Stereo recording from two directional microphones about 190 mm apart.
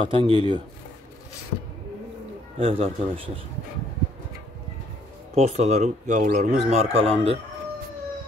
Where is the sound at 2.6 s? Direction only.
30° right (ahead or behind).